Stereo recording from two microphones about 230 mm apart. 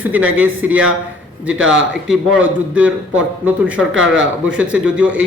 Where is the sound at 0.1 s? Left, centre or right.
Centre.